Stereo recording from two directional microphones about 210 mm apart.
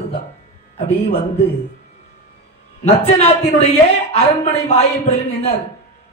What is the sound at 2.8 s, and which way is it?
A man's voice, 30° left (ahead or behind).